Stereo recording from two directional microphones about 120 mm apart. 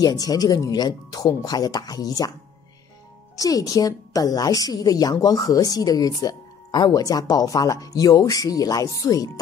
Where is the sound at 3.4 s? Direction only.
30° left (ahead or behind).